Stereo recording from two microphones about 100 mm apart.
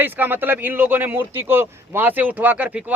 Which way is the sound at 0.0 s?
20° right (ahead or behind).